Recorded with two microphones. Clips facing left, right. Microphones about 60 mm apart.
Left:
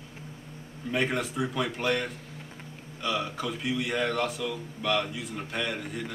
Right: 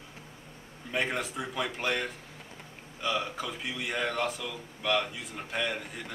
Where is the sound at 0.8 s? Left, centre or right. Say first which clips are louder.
Left 3 dB; centre.